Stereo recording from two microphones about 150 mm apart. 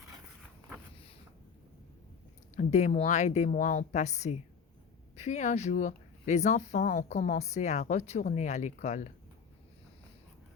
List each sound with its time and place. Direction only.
2.6 s speech: 50° left (ahead or behind)